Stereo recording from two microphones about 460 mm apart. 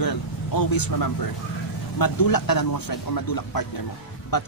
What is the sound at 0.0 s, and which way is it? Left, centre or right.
Vehicle, left.